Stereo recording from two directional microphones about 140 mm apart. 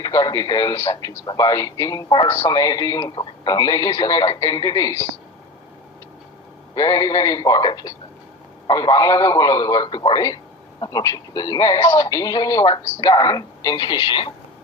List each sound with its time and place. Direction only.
0.0 s speech: 25° left (ahead or behind)
1.2 s speech: 30° left (ahead or behind)
6.7 s speech: 25° left (ahead or behind)